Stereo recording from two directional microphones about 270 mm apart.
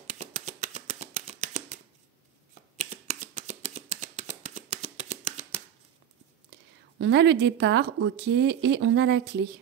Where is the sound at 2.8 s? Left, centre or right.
Right.